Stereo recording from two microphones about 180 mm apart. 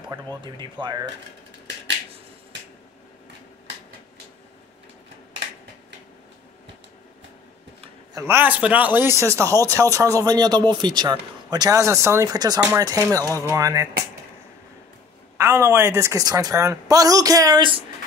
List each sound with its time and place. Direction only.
0.1 s a woman's voice: 25° right (ahead or behind)
8.1 s speech: 15° right (ahead or behind)
15.3 s a woman's voice: 15° right (ahead or behind)